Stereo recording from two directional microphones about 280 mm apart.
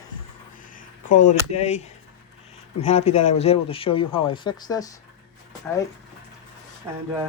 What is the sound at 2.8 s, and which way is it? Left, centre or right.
Speech, left.